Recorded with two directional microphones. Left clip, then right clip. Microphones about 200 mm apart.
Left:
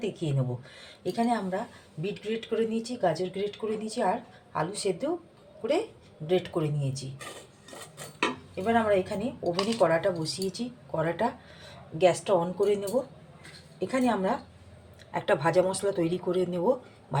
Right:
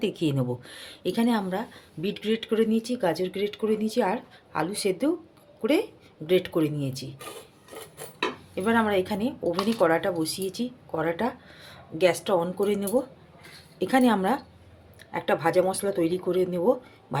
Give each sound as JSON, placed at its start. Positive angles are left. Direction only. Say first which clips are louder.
{"t": 0.0, "sound": "speech", "louder": "right 5 dB", "side_deg": -40}
{"t": 8.5, "sound": "speech", "louder": "right 1 dB", "side_deg": -40}
{"t": 13.7, "sound": "speech", "louder": "right 5 dB", "side_deg": -45}
{"t": 15.1, "sound": "speech", "louder": "right 1 dB", "side_deg": -20}